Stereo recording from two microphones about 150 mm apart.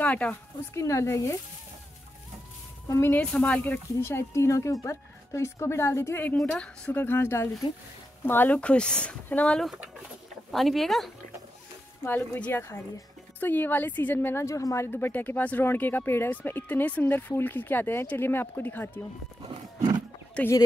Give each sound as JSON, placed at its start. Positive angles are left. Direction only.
{"t": 0.0, "sound": "speech", "side_deg": 10}
{"t": 2.9, "sound": "speech", "side_deg": 15}
{"t": 12.0, "sound": "speech", "side_deg": 15}
{"t": 20.4, "sound": "speech", "side_deg": 5}